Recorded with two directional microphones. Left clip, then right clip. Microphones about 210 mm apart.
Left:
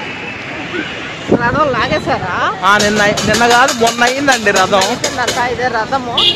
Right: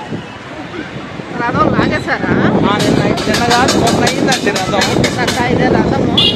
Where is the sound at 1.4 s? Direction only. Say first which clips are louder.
Right 3 dB; centre (ahead or behind).